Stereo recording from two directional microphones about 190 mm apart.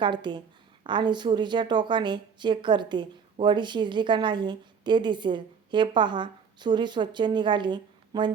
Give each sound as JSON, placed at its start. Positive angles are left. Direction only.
{"t": 0.0, "sound": "a woman's voice", "side_deg": -25}